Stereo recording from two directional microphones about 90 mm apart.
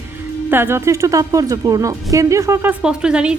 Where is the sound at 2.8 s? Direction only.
10° right (ahead or behind).